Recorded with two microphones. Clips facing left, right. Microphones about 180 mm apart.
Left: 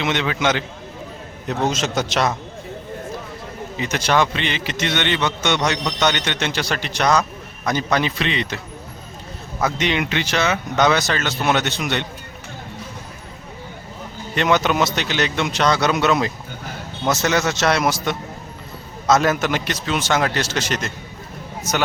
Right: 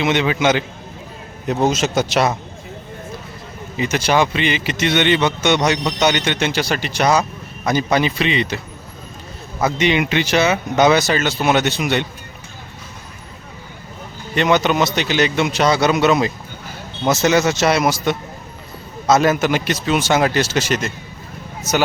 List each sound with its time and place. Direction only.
0.0 s speech: 5° right (ahead or behind)
3.8 s a man's voice: 5° right (ahead or behind)
14.3 s a man's voice: centre (ahead or behind)